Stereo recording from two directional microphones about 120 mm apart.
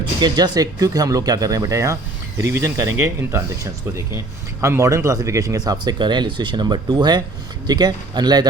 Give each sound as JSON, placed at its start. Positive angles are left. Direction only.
{"t": 0.2, "sound": "speech", "side_deg": -35}